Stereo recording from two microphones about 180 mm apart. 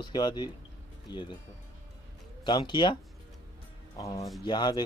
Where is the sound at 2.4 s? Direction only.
25° left (ahead or behind).